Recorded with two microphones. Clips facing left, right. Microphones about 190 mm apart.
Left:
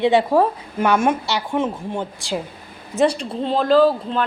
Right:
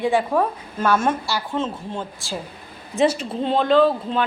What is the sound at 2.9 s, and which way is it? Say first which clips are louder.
A woman's voice: left 1 dB; 5° right (ahead or behind).